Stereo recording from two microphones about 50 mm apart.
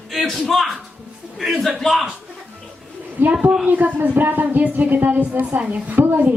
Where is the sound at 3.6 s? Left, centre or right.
Right.